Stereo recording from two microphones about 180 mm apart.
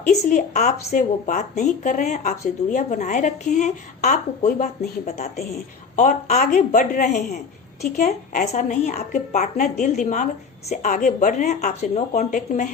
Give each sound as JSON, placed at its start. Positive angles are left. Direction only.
{"t": 0.1, "sound": "a woman's voice", "side_deg": 45}